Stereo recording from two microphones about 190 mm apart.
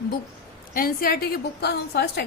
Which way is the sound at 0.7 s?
50° left (ahead or behind).